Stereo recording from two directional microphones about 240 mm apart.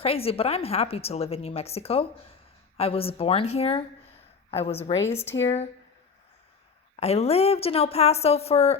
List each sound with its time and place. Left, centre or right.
0.0 s a woman's voice: left
6.9 s a woman's voice: left